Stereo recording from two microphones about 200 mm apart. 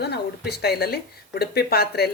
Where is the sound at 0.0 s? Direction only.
55° left (ahead or behind).